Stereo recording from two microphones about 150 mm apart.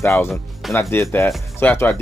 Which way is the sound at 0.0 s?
15° left (ahead or behind).